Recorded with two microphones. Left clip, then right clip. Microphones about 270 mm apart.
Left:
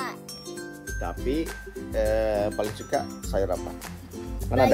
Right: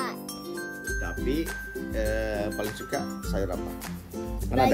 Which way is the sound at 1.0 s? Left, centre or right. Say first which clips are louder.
Left 4 dB; centre.